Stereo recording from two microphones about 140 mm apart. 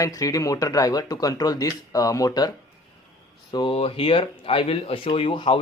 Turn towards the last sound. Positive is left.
turn(degrees=40)  # may be behind; listen again after turning